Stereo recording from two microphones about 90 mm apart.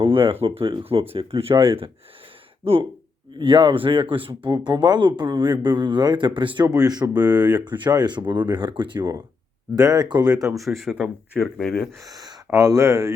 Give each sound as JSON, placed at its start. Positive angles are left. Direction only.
{"t": 0.0, "sound": "speech", "side_deg": -70}
{"t": 2.6, "sound": "speech", "side_deg": -90}
{"t": 3.3, "sound": "speech", "side_deg": -65}
{"t": 6.7, "sound": "speech", "side_deg": -45}
{"t": 9.7, "sound": "speech", "side_deg": -45}
{"t": 10.8, "sound": "speech", "side_deg": 0}
{"t": 11.9, "sound": "speech", "side_deg": -40}
{"t": 12.5, "sound": "speech", "side_deg": -35}